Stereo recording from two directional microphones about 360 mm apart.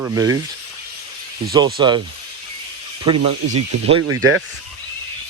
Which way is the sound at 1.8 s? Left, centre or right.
Centre.